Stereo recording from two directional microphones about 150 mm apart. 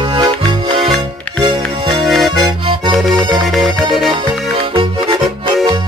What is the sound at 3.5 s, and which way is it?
Music, centre (ahead or behind).